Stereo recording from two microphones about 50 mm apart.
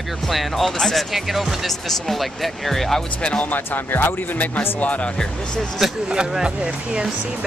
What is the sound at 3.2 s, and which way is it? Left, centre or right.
Speech, left.